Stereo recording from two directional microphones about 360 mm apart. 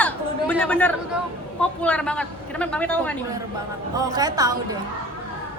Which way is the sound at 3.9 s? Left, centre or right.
Centre.